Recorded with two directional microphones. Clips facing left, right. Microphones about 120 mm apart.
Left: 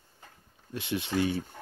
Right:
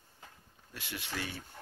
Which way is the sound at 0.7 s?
20° left (ahead or behind).